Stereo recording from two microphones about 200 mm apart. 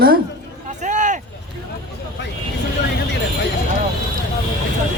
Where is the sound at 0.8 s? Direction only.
40° right (ahead or behind).